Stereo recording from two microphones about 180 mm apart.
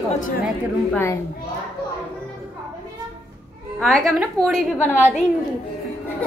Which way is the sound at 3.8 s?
Centre (ahead or behind).